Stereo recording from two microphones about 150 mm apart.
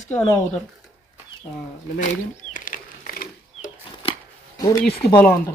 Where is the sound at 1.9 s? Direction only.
55° left (ahead or behind).